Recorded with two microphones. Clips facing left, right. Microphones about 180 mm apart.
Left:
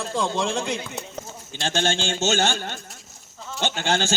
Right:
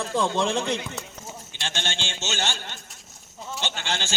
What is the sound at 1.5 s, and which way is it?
Speech, 40° left (ahead or behind).